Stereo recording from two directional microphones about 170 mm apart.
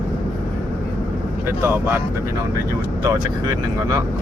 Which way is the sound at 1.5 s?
15° right (ahead or behind).